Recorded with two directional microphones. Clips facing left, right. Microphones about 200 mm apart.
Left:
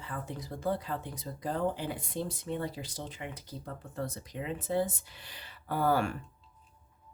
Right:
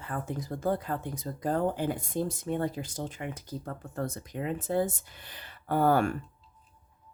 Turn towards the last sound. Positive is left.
turn(degrees=-45)  # may be behind; listen again after turning